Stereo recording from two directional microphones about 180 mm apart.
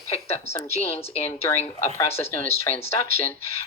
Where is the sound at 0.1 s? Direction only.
35° left (ahead or behind).